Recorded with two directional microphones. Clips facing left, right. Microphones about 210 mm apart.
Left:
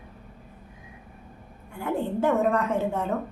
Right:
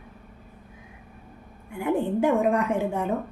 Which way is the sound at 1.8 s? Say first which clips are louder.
Right 3 dB; 15° right (ahead or behind).